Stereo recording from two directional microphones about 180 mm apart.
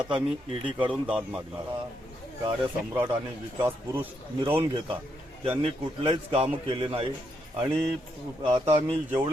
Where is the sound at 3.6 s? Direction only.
10° right (ahead or behind).